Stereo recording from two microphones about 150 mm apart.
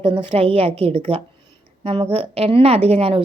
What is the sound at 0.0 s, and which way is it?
A woman's voice, 35° right (ahead or behind).